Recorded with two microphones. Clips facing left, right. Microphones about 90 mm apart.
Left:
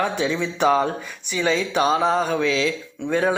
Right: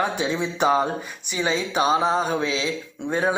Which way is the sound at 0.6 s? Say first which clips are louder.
Left 2 dB; 15° right (ahead or behind).